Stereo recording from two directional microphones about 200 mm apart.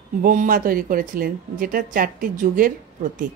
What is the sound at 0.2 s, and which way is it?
A woman's voice, 40° right (ahead or behind).